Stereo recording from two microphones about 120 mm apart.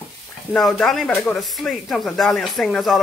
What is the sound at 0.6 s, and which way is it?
Speech, centre (ahead or behind).